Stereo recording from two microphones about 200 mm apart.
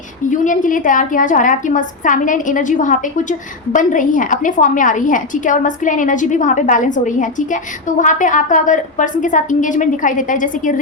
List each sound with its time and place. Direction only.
0.3 s a woman's voice: 40° left (ahead or behind)